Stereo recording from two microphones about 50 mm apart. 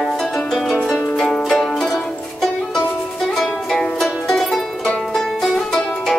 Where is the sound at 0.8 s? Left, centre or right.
Left.